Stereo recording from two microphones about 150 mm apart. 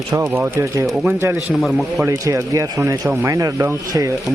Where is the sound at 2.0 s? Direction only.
20° right (ahead or behind).